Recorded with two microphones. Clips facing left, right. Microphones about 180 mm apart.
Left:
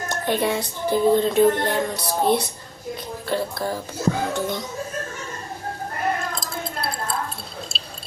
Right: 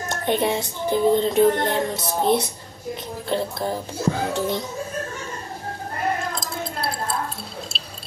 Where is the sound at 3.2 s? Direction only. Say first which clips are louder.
Even; 25° right (ahead or behind).